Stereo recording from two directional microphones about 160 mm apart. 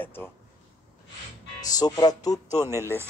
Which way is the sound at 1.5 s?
25° left (ahead or behind).